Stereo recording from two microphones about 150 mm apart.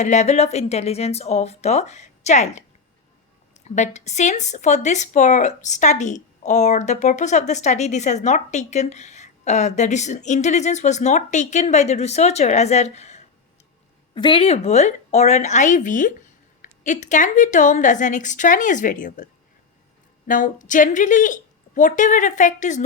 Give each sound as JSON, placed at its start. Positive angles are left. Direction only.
{"t": 0.0, "sound": "speech", "side_deg": 50}
{"t": 14.1, "sound": "a woman's voice", "side_deg": 35}